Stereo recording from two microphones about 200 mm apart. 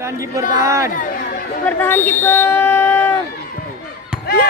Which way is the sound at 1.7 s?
10° left (ahead or behind).